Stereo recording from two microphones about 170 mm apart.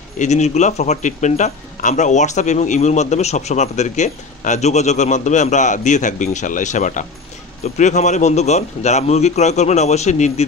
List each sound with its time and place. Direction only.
0.2 s a man's voice: 45° left (ahead or behind)